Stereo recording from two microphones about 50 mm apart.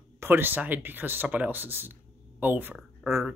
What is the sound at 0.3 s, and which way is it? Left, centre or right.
Speech, right.